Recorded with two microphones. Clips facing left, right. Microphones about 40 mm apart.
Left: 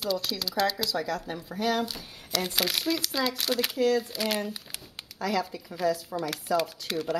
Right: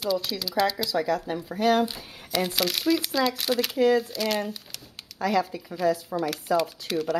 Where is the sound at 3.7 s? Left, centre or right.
Right.